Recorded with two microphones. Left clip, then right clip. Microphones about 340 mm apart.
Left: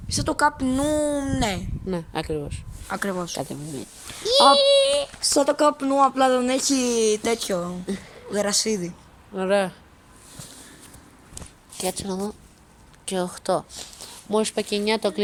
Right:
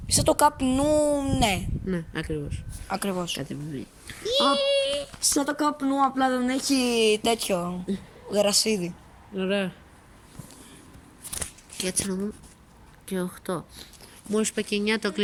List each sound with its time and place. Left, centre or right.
0.1 s a child's voice: centre
1.9 s speech: centre
2.8 s a child's voice: centre
4.3 s a child's voice: centre
9.3 s speech: centre
11.8 s a child's voice: centre